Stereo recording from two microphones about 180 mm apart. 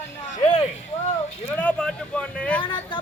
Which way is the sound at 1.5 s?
5° left (ahead or behind).